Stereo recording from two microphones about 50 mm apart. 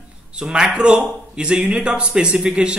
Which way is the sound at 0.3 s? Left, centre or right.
Centre.